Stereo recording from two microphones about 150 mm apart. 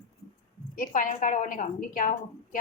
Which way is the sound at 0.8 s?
65° left (ahead or behind).